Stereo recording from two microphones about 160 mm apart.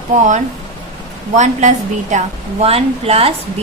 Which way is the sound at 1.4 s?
50° right (ahead or behind).